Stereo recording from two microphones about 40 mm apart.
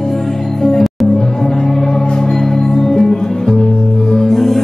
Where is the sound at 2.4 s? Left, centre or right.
Centre.